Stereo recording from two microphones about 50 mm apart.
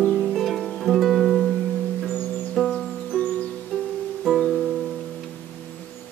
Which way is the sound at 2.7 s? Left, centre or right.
Centre.